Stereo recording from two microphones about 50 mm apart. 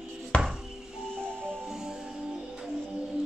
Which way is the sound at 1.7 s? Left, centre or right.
Centre.